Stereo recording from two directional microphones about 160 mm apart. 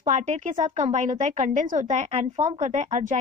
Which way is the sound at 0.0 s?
50° right (ahead or behind).